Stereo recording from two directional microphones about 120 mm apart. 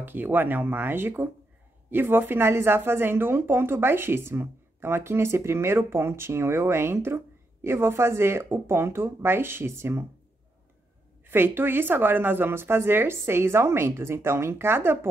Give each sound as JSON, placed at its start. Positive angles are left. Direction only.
{"t": 0.0, "sound": "a woman's voice", "side_deg": -15}
{"t": 11.2, "sound": "a woman's voice", "side_deg": -20}